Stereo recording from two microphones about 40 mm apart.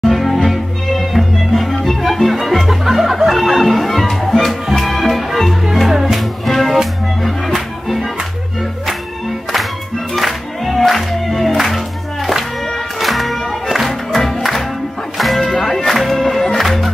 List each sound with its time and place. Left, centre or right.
0.0 s cello: centre
0.5 s music: centre
10.1 s music: centre
13.0 s music: centre